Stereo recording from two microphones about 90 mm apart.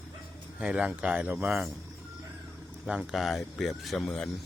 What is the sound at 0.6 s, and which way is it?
Speech, 10° right (ahead or behind).